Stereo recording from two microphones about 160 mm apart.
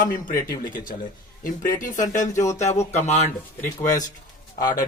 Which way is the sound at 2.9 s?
45° left (ahead or behind).